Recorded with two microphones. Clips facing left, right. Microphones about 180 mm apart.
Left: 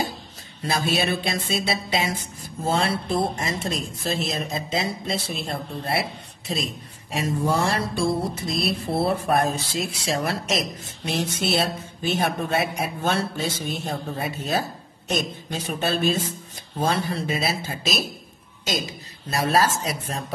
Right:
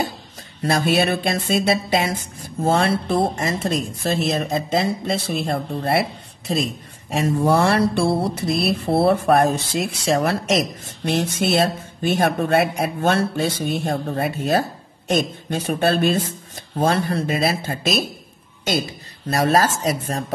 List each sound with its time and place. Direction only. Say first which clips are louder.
0.7 s speech: right 5 dB; 60° right (ahead or behind)
7.2 s speech: right 6 dB; 65° right (ahead or behind)
19.3 s speech: right 3 dB; 45° right (ahead or behind)